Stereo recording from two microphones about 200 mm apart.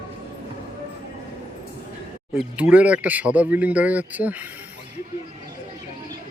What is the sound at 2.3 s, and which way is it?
Speech, 5° right (ahead or behind).